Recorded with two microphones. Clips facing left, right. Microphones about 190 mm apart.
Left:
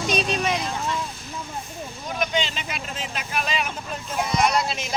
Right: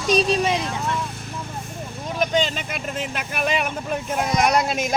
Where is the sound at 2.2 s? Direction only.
45° right (ahead or behind).